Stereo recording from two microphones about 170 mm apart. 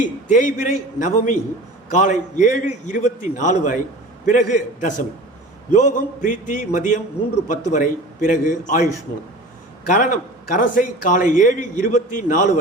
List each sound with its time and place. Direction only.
0.3 s a man's voice: 50° left (ahead or behind)